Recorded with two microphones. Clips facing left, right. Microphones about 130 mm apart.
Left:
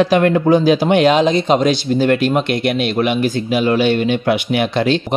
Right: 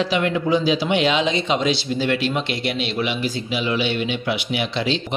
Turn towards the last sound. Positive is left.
turn(degrees=50)  # may be behind; listen again after turning